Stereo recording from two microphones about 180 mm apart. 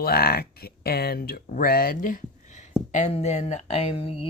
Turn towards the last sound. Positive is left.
turn(degrees=30)  # may be behind; listen again after turning